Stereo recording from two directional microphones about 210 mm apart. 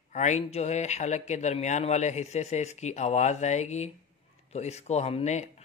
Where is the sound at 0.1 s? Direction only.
35° left (ahead or behind).